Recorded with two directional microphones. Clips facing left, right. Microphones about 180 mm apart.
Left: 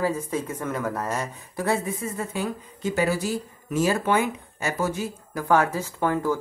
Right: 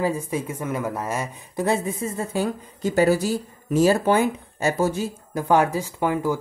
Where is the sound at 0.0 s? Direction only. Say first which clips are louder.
Right 1 dB; 10° right (ahead or behind).